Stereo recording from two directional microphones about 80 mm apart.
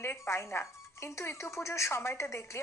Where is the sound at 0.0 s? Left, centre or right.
Left.